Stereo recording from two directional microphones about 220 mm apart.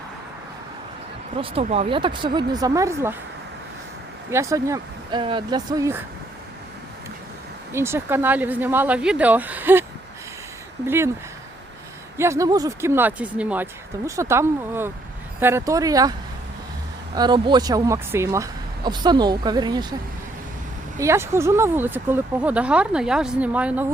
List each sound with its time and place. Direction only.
1.4 s speech: 25° right (ahead or behind)
4.3 s speech: 15° right (ahead or behind)
7.7 s speech: 10° right (ahead or behind)
10.8 s speech: 10° right (ahead or behind)
12.1 s speech: 10° right (ahead or behind)
17.2 s speech: 20° right (ahead or behind)
21.0 s speech: 10° right (ahead or behind)